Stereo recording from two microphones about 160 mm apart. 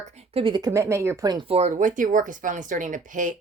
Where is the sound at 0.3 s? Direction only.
30° right (ahead or behind).